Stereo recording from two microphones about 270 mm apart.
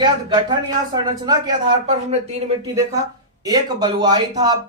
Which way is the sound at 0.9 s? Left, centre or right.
Centre.